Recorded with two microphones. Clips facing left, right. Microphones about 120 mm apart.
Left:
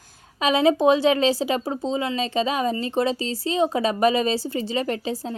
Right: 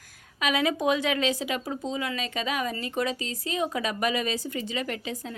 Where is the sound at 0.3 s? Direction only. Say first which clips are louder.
Left 7 dB; 30° left (ahead or behind).